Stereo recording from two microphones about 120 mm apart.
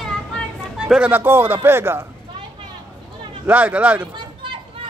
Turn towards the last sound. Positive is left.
turn(degrees=-45)  # may be behind; listen again after turning